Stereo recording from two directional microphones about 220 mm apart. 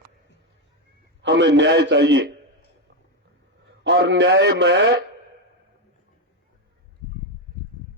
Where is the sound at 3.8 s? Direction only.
55° right (ahead or behind).